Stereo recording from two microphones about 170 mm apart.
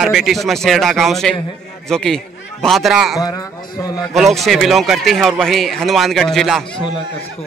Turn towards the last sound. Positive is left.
turn(degrees=0)  # may be behind; listen again after turning